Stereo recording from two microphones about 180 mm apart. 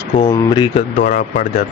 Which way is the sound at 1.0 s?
45° left (ahead or behind).